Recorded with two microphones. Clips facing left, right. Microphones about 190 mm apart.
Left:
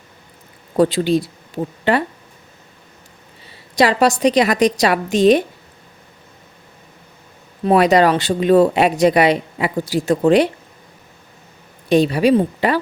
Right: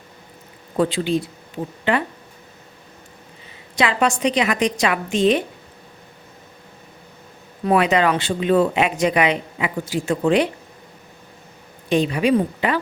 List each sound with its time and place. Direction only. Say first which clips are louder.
0.8 s speech: left 5 dB; 40° left (ahead or behind)
3.8 s speech: left 5 dB; 40° left (ahead or behind)
7.6 s speech: left 4 dB; 35° left (ahead or behind)
11.9 s speech: left 4 dB; 35° left (ahead or behind)